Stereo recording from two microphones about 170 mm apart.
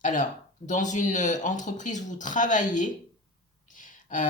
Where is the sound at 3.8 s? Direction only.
50° left (ahead or behind).